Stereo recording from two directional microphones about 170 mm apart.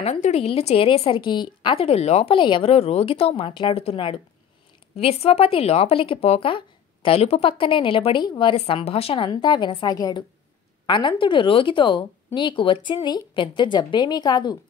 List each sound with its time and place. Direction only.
0.0 s speech: 40° left (ahead or behind); by 14.6 s 25° left (ahead or behind)